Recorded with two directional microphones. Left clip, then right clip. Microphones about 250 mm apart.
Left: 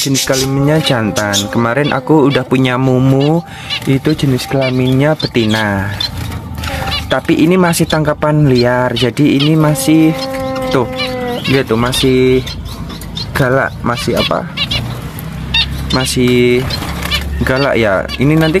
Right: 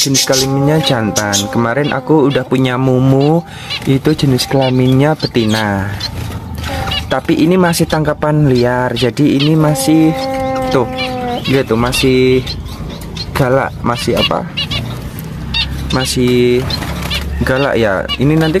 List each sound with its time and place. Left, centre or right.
0.3 s speech: centre
3.9 s speech: centre
7.1 s speech: centre
15.9 s speech: centre